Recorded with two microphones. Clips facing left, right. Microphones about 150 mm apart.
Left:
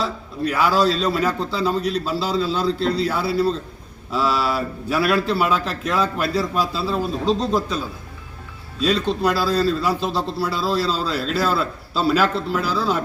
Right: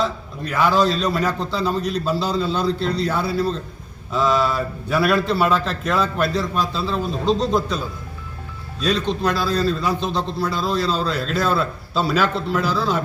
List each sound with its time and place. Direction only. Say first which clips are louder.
0.0 s a man's voice: even; 5° left (ahead or behind)
8.8 s a man's voice: left 1 dB; 5° left (ahead or behind)